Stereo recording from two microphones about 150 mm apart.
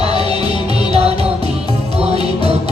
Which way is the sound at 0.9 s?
40° right (ahead or behind).